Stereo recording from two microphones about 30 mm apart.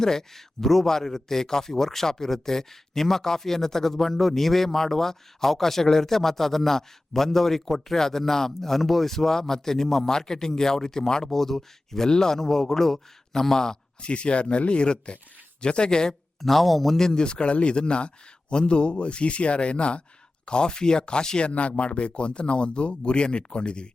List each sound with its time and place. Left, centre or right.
0.0 s a man's voice: centre
14.0 s a man's voice: left
16.4 s speech: centre
17.0 s speech: centre
17.2 s a man's voice: left
21.5 s a man's voice: left